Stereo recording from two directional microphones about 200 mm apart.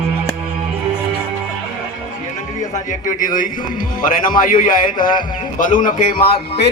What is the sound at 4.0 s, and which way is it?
A man's voice, 45° left (ahead or behind).